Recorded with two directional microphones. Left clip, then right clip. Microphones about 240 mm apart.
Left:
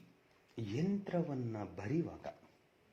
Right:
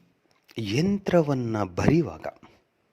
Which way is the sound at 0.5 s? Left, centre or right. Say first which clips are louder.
Right 13 dB; right.